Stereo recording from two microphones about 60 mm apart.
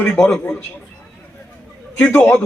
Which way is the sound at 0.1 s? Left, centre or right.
Centre.